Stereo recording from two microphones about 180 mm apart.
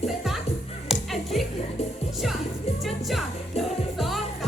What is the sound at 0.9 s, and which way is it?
Music, centre (ahead or behind).